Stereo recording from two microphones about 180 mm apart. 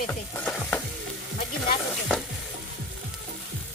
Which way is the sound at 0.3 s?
5° left (ahead or behind).